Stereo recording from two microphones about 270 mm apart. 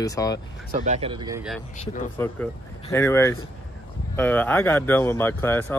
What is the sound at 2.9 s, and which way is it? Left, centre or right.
Speech, centre.